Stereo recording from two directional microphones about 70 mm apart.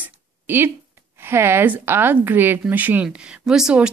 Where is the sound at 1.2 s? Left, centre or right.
Right.